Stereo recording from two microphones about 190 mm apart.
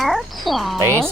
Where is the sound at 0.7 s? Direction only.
10° right (ahead or behind).